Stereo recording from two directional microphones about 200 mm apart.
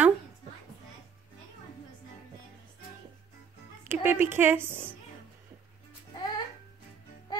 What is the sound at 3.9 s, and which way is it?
Speech, 10° right (ahead or behind).